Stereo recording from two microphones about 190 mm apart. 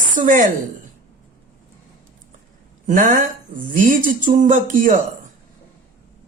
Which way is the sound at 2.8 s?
45° right (ahead or behind).